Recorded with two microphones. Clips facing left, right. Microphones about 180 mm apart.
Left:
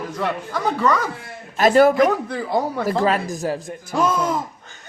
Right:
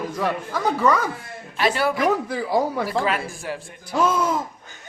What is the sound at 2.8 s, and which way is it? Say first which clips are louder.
Speech: left 4 dB; 40° left (ahead or behind).